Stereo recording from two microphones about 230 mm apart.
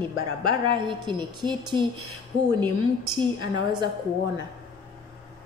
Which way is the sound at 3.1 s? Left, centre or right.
Centre.